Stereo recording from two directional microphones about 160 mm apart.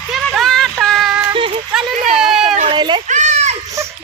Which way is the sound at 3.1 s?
45° right (ahead or behind).